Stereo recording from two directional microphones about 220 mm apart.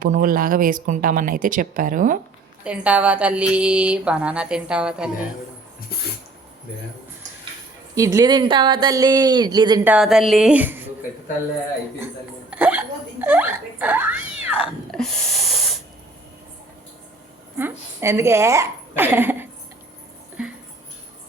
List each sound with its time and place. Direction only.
0.0 s speech: 40° right (ahead or behind)
2.6 s speech: 5° right (ahead or behind)
7.9 s speech: 15° right (ahead or behind)
9.8 s speech: 5° right (ahead or behind)
12.5 s a sound: 10° right (ahead or behind)
14.9 s a sound: centre (ahead or behind)
17.6 s a woman's voice: 10° right (ahead or behind)